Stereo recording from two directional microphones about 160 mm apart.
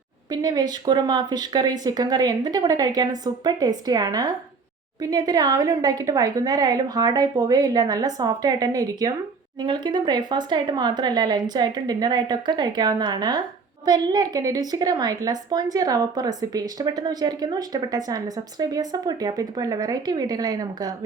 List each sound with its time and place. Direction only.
0.3 s a woman's voice: 25° right (ahead or behind)